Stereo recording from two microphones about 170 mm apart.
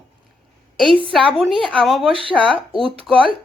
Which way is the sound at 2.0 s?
30° right (ahead or behind).